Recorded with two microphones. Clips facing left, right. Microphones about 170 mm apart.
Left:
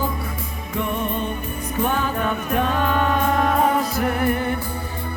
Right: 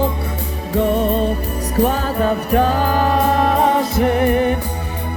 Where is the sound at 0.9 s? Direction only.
90° right.